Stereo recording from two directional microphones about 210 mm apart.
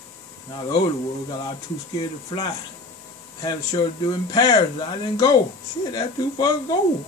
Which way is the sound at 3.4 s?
20° left (ahead or behind).